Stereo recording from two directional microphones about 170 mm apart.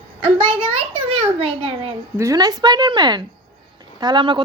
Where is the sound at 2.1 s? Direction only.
20° right (ahead or behind).